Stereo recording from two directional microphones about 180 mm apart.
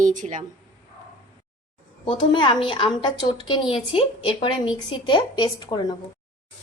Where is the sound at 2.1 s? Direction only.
25° left (ahead or behind).